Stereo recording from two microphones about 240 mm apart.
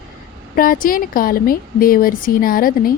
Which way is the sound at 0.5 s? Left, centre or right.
Left.